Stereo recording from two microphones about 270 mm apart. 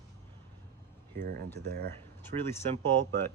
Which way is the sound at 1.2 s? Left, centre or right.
Right.